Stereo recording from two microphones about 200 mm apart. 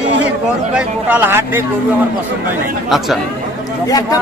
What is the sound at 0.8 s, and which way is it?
Speech, 10° right (ahead or behind).